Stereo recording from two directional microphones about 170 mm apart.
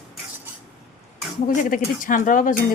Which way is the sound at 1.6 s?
55° left (ahead or behind).